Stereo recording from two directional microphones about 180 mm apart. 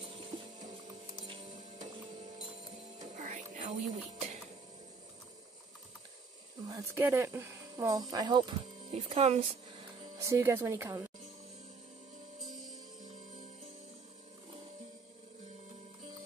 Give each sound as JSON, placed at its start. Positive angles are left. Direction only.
{"t": 0.0, "sound": "music", "side_deg": -30}
{"t": 3.0, "sound": "music", "side_deg": -45}
{"t": 6.7, "sound": "speech", "side_deg": -15}
{"t": 10.1, "sound": "speech", "side_deg": -15}